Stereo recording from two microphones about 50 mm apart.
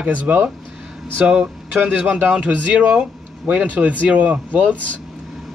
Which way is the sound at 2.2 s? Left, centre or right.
Right.